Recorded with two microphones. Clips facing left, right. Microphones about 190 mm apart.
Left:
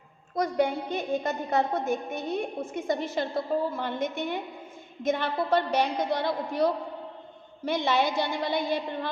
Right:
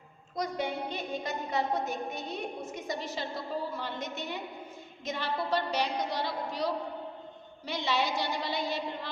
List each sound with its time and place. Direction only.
0.3 s a woman's voice: 55° left (ahead or behind)